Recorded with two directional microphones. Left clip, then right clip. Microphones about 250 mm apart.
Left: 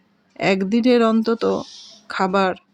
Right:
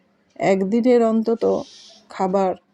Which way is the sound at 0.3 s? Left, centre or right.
Centre.